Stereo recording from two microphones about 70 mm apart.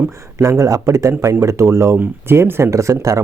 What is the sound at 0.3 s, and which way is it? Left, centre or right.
Speech, right.